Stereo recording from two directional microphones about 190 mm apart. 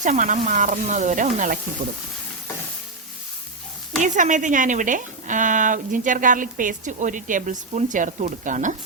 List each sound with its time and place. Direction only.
0.0 s speech: 40° right (ahead or behind)
4.0 s a woman's voice: 40° right (ahead or behind)